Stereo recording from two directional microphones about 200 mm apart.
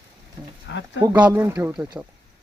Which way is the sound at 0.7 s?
60° left (ahead or behind).